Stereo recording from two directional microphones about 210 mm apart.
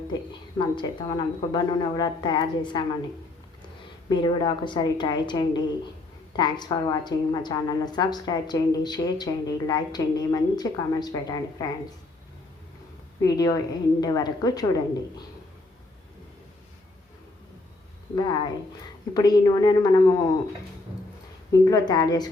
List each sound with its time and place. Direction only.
0.8 s a woman's voice: 20° left (ahead or behind)
4.1 s a woman's voice: 20° left (ahead or behind)
13.2 s speech: 20° left (ahead or behind)
18.1 s a woman's voice: 20° left (ahead or behind)
21.5 s speech: 15° left (ahead or behind)